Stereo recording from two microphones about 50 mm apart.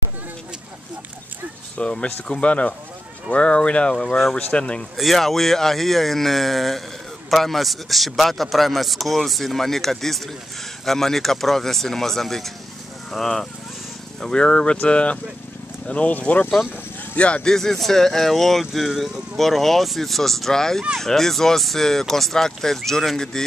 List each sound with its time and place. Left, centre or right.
1.8 s speech: left
4.9 s speech: centre
14.2 s speech: centre
17.5 s speech: centre